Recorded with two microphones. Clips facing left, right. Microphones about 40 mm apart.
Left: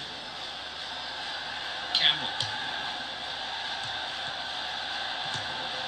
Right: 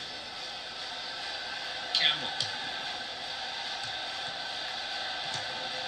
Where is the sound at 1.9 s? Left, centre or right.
Left.